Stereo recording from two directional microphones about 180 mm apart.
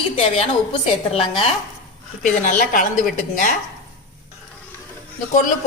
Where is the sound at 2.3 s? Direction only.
45° left (ahead or behind).